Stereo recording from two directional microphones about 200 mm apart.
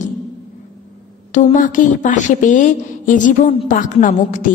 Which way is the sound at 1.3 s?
40° left (ahead or behind).